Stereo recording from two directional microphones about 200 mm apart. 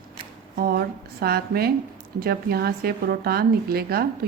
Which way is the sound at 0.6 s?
50° right (ahead or behind).